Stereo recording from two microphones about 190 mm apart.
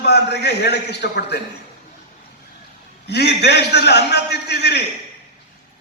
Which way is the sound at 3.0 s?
60° left (ahead or behind).